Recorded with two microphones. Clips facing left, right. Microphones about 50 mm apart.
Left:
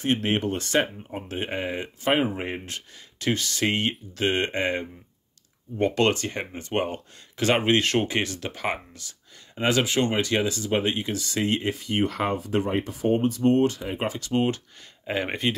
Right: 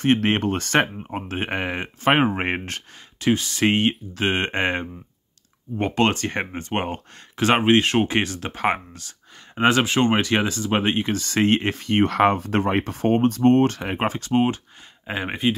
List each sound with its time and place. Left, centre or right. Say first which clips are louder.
0.0 s speech: right 5 dB; right
3.2 s speech: right 5 dB; right
5.8 s speech: right 1 dB; right
6.1 s speech: right 5 dB; right
13.9 s speech: right 4 dB; right
15.0 s speech: right 2 dB; centre